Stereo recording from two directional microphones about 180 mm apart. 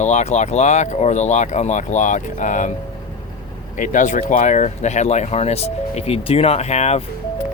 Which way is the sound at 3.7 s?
45° left (ahead or behind).